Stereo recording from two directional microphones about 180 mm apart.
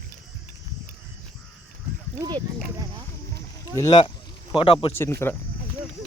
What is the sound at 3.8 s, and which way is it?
A man's voice, 25° left (ahead or behind).